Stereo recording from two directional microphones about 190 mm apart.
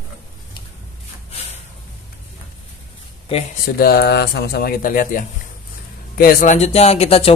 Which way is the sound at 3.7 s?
55° left (ahead or behind).